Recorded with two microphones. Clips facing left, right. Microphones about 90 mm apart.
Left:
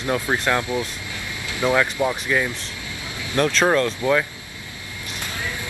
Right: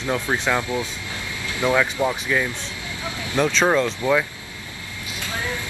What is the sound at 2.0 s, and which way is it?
Speech, 15° right (ahead or behind).